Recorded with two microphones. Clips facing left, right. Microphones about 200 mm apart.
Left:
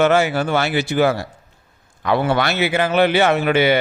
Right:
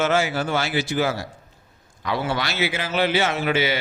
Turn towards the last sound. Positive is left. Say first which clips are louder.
# left 7 dB
turn(degrees=55)  # may be behind; listen again after turning